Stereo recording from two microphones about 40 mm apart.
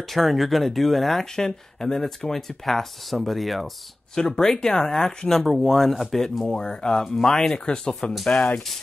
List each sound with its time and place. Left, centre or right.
0.1 s speech: centre
1.3 s speech: centre
4.1 s speech: centre
8.3 s speech: left